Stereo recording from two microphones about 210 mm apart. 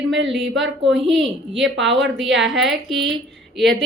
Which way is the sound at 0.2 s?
60° right (ahead or behind).